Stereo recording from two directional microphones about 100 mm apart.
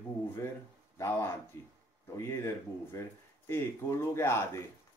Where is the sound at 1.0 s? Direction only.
25° left (ahead or behind).